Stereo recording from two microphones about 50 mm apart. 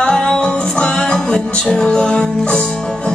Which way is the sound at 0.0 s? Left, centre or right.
Centre.